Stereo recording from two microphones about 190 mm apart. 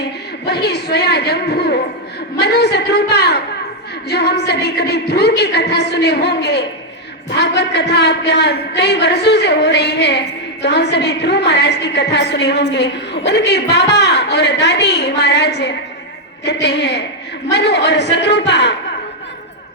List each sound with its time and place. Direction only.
0.0 s a man's voice: 60° left (ahead or behind)